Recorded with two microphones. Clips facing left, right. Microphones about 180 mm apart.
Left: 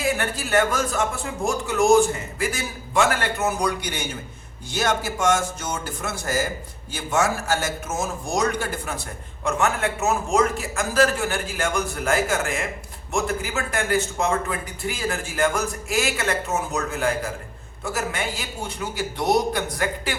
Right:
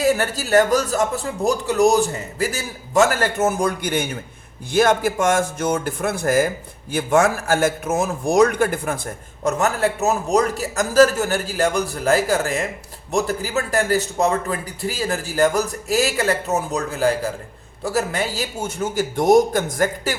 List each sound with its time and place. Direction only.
0.0 s a man's voice: 40° right (ahead or behind); by 9.0 s 55° right (ahead or behind)
9.4 s a man's voice: 40° right (ahead or behind)